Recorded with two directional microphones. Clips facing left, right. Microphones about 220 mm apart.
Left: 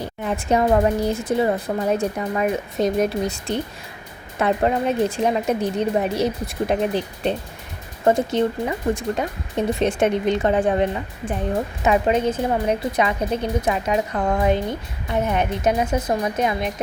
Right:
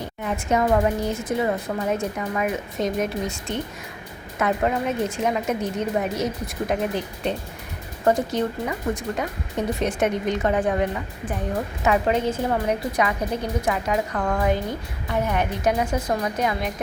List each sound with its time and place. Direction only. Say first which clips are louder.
0.5 s a woman's voice: left 3 dB; 35° left (ahead or behind)